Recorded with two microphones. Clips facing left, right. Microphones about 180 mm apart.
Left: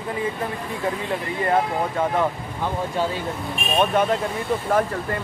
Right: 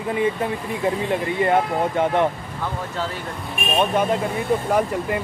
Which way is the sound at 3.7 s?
10° right (ahead or behind).